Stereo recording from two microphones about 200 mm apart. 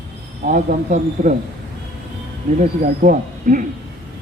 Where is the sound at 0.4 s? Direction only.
40° right (ahead or behind).